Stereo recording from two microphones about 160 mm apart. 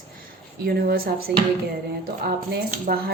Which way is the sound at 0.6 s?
75° right (ahead or behind).